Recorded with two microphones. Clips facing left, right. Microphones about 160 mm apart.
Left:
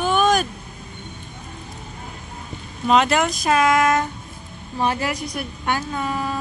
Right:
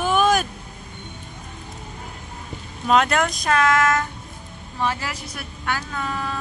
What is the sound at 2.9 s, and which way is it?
Speech, centre (ahead or behind).